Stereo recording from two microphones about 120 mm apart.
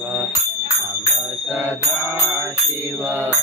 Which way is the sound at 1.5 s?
20° right (ahead or behind).